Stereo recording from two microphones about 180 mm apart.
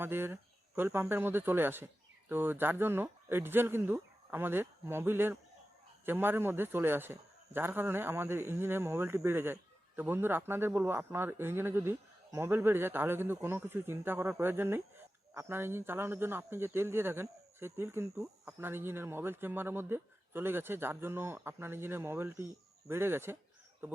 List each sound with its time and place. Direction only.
0.0 s a man's voice: 10° right (ahead or behind)